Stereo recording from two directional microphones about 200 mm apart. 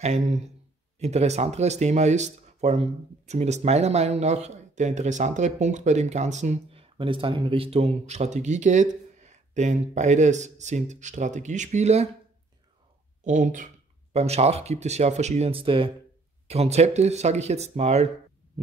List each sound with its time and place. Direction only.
0.0 s speech: 30° right (ahead or behind)
13.2 s speech: 40° right (ahead or behind)